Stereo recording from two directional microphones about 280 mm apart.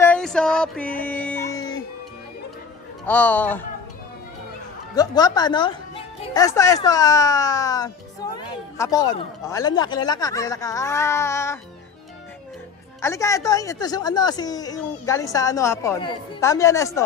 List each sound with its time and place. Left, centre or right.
0.0 s a sound: centre
3.1 s speech: centre
4.9 s speech: centre
13.0 s speech: centre